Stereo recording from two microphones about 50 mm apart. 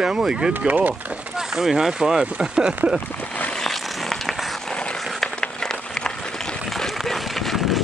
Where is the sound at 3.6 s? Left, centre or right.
Centre.